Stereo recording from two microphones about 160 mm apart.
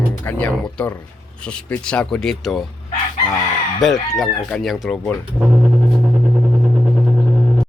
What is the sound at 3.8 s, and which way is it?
Speech, centre (ahead or behind).